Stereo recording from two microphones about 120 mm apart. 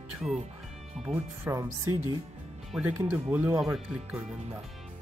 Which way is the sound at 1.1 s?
20° right (ahead or behind).